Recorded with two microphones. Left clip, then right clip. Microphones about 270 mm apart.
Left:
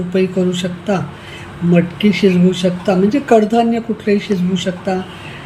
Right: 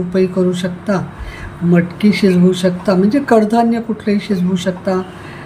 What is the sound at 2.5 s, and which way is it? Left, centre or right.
Speech, centre.